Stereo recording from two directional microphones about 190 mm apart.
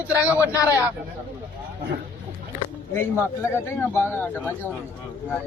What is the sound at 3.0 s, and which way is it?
A man's voice, 15° left (ahead or behind).